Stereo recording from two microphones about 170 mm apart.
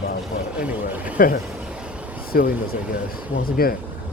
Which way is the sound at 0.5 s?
10° right (ahead or behind).